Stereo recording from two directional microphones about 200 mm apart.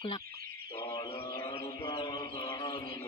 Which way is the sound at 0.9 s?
25° left (ahead or behind).